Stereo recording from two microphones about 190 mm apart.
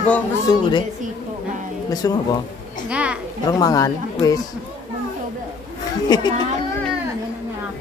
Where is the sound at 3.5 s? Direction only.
20° left (ahead or behind).